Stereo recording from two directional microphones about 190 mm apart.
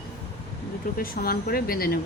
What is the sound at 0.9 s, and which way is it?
Speech, 50° left (ahead or behind).